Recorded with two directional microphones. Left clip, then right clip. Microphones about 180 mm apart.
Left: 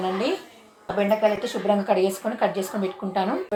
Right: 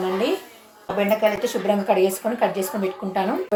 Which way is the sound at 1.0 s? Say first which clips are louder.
Right 1 dB; centre (ahead or behind).